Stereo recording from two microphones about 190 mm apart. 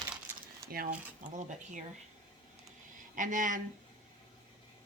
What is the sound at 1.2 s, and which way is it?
Speech, 45° right (ahead or behind).